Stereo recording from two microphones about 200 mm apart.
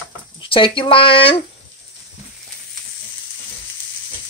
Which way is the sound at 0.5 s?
25° left (ahead or behind).